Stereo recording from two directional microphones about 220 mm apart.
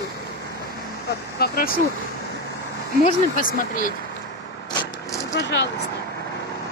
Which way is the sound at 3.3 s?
40° left (ahead or behind).